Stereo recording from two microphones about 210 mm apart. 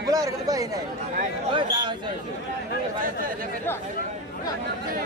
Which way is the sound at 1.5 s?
20° right (ahead or behind).